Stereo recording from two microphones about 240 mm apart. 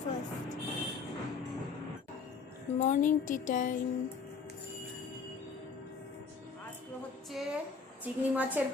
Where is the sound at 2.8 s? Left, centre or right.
Left.